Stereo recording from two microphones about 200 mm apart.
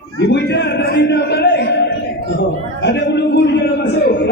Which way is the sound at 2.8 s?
60° left (ahead or behind).